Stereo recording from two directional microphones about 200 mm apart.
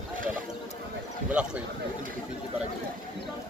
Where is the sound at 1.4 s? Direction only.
5° right (ahead or behind).